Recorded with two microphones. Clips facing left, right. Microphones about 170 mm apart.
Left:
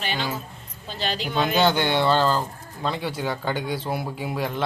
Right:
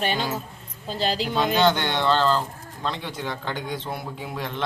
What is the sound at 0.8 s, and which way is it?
Speech, 35° right (ahead or behind).